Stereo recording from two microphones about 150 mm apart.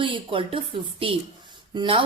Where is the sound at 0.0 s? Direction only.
35° right (ahead or behind).